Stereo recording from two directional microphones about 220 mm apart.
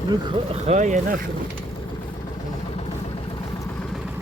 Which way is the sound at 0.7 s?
35° right (ahead or behind).